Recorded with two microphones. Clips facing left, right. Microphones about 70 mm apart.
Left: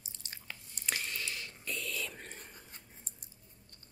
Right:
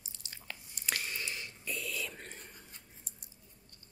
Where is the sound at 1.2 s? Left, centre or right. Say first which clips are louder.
Even; right.